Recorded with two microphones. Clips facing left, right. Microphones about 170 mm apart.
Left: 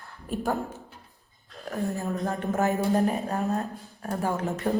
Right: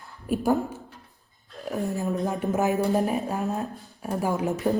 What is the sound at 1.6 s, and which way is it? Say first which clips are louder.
Speech: right 2 dB; 15° right (ahead or behind).